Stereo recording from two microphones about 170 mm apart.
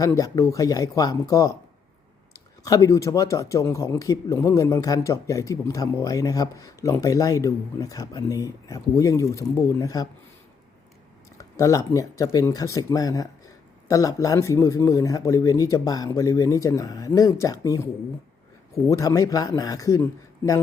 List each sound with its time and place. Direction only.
0.0 s speech: 20° left (ahead or behind)
2.6 s speech: 20° left (ahead or behind)
11.3 s speech: 20° left (ahead or behind)
18.9 s speech: 20° left (ahead or behind)